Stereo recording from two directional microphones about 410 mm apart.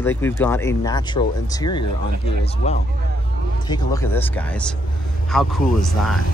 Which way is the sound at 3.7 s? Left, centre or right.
Centre.